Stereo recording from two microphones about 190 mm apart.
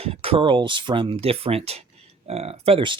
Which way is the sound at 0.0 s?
30° right (ahead or behind).